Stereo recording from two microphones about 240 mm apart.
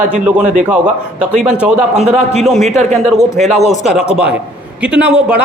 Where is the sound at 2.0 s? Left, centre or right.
Right.